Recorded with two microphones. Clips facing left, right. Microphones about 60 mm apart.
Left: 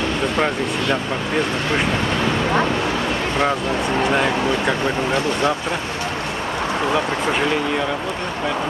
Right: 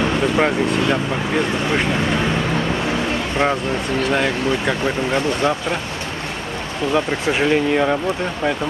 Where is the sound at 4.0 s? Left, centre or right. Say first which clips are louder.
Even; centre.